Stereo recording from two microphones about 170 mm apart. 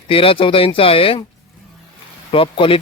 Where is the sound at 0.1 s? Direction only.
30° left (ahead or behind).